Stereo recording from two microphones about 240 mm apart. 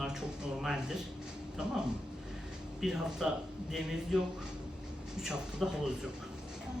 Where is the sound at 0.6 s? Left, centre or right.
Centre.